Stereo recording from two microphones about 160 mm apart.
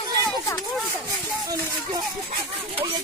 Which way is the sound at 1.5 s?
25° right (ahead or behind).